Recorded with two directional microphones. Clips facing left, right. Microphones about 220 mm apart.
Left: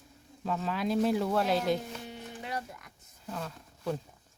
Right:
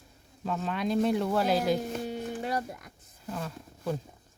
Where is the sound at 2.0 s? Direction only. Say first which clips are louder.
Right 9 dB; 40° right (ahead or behind).